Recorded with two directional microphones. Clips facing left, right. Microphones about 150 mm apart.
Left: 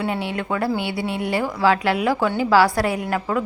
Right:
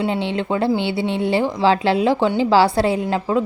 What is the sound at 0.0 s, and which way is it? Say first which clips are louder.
Speech: right 3 dB; 25° right (ahead or behind).